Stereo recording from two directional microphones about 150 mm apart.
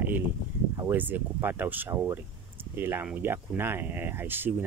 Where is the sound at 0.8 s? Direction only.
10° right (ahead or behind).